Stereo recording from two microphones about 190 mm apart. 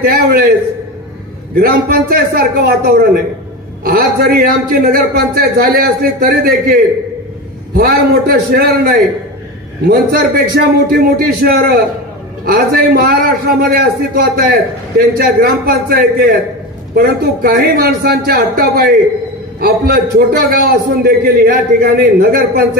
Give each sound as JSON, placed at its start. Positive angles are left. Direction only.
{"t": 0.0, "sound": "a man's voice", "side_deg": -50}